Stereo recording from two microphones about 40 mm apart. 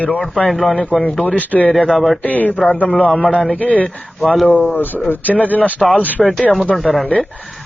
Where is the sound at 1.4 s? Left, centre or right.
Left.